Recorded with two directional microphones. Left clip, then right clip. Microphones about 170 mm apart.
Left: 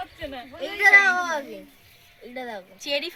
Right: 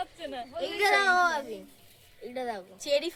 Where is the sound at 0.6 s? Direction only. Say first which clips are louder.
Left 9 dB; 45° right (ahead or behind).